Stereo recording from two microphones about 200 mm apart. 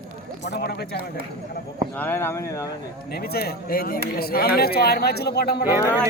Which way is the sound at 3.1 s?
50° left (ahead or behind).